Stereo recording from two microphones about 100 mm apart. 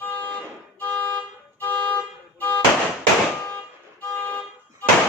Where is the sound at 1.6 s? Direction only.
20° left (ahead or behind).